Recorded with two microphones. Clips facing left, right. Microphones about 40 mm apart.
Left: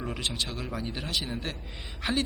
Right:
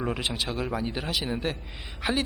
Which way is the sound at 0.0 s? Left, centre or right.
Centre.